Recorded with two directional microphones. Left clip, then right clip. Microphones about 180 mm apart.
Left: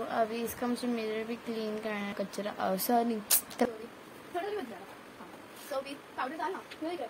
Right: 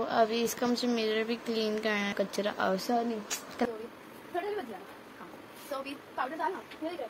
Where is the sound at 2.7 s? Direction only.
15° left (ahead or behind).